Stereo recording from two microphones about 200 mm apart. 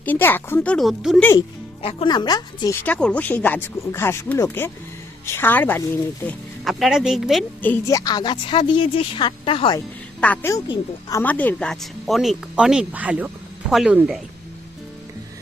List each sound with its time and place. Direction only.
0.0 s speech: 10° left (ahead or behind)
1.8 s a woman's voice: 25° left (ahead or behind); by 7.4 s centre (ahead or behind)
7.6 s a woman's voice: 10° left (ahead or behind)
10.2 s a woman's voice: 5° left (ahead or behind)